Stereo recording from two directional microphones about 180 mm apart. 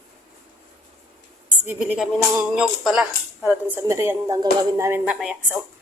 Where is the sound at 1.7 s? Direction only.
5° right (ahead or behind).